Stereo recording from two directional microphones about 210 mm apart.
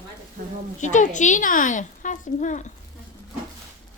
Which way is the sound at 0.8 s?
35° left (ahead or behind).